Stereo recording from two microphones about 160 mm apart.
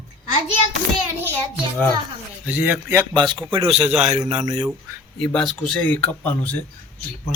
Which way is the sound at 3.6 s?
40° right (ahead or behind).